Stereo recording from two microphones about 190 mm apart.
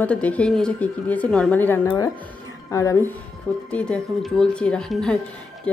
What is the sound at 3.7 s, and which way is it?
A woman's voice, 5° left (ahead or behind).